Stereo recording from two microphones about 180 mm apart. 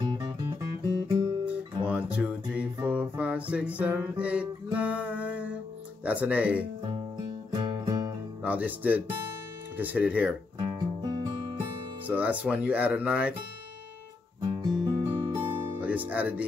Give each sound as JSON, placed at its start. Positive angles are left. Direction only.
{"t": 0.0, "sound": "music", "side_deg": -25}
{"t": 1.9, "sound": "music", "side_deg": -5}
{"t": 6.0, "sound": "speech", "side_deg": -10}
{"t": 7.5, "sound": "music", "side_deg": -20}
{"t": 8.4, "sound": "speech", "side_deg": -10}
{"t": 11.0, "sound": "music", "side_deg": -25}
{"t": 12.1, "sound": "speech", "side_deg": -10}
{"t": 14.6, "sound": "music", "side_deg": -25}
{"t": 15.3, "sound": "music", "side_deg": -10}